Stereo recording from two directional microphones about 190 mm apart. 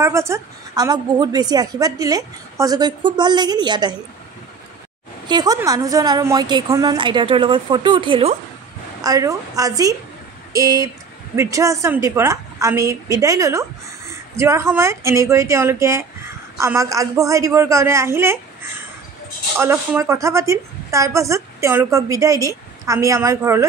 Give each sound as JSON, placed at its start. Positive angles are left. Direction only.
{"t": 0.0, "sound": "a woman's voice", "side_deg": -15}
{"t": 5.3, "sound": "a woman's voice", "side_deg": -20}
{"t": 9.0, "sound": "a woman's voice", "side_deg": -20}
{"t": 19.6, "sound": "a woman's voice", "side_deg": -15}